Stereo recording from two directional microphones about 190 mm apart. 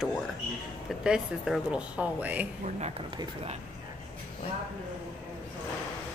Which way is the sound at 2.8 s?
30° right (ahead or behind).